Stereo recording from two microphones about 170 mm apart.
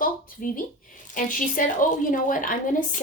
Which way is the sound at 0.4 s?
55° left (ahead or behind).